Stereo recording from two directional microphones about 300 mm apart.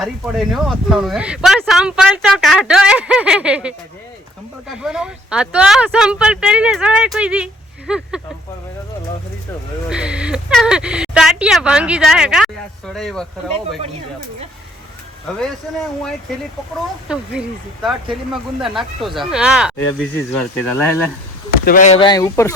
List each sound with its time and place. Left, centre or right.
0.0 s speech: centre
4.8 s speech: centre
9.9 s speech: centre
17.1 s speech: centre
18.6 s speech: centre
21.6 s speech: left; by 22.5 s centre